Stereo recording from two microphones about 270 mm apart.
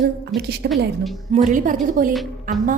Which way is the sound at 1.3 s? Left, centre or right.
Right.